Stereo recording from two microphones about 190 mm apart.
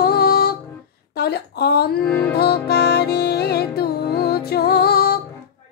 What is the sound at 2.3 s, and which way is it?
Music, 55° left (ahead or behind).